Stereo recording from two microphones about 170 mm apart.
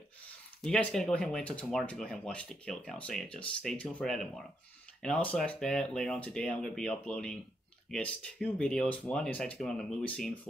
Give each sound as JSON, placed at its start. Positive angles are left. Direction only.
{"t": 0.7, "sound": "speech", "side_deg": 5}